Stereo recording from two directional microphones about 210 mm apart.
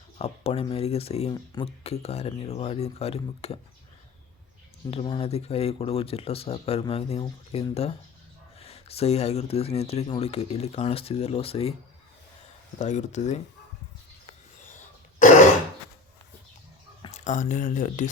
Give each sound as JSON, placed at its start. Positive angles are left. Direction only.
{"t": 0.2, "sound": "speech", "side_deg": 30}
{"t": 4.9, "sound": "speech", "side_deg": 25}
{"t": 12.8, "sound": "speech", "side_deg": 35}
{"t": 17.2, "sound": "speech", "side_deg": 35}